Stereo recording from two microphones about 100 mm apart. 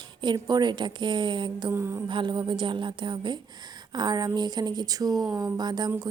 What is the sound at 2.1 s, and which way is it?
A woman's voice, 55° right (ahead or behind).